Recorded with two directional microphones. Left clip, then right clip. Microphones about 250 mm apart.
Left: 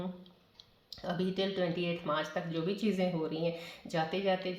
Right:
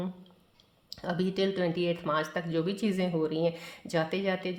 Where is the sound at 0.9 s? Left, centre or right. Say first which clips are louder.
Right 3 dB; right.